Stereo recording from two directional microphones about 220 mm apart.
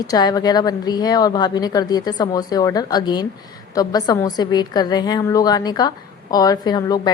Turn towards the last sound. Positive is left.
turn(degrees=20)  # may be behind; listen again after turning